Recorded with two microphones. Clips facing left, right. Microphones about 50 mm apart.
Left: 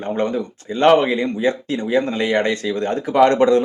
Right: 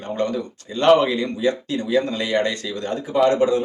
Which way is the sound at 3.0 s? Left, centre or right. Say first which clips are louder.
Left 4 dB; left.